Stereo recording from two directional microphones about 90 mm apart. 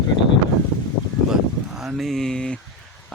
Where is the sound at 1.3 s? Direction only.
5° right (ahead or behind).